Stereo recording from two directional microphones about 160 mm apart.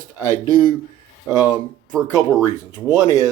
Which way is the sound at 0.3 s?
25° right (ahead or behind).